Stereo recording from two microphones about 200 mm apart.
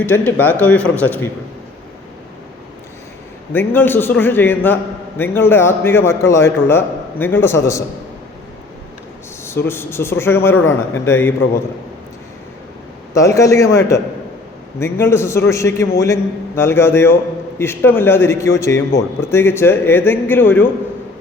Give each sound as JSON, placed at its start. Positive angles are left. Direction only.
{"t": 0.0, "sound": "a man's voice", "side_deg": 10}
{"t": 3.5, "sound": "a man's voice", "side_deg": 10}
{"t": 9.6, "sound": "a man's voice", "side_deg": 10}
{"t": 13.1, "sound": "a man's voice", "side_deg": 15}